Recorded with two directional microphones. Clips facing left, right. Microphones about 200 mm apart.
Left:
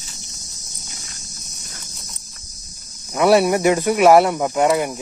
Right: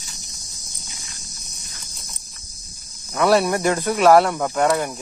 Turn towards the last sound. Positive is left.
turn(degrees=10)  # may be behind; listen again after turning